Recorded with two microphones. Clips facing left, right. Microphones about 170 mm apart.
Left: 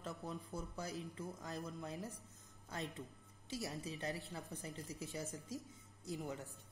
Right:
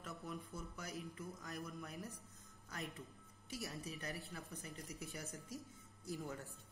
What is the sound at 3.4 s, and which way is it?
A woman's voice, 20° left (ahead or behind).